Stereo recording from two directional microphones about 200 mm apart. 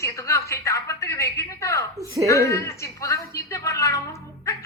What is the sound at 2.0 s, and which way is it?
Speech, 15° right (ahead or behind).